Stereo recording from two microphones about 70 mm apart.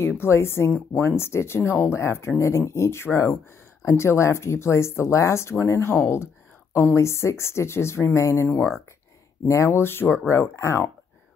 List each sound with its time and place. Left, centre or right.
0.2 s speech: left
9.5 s speech: left